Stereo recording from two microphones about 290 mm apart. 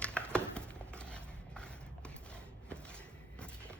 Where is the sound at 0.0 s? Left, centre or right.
Centre.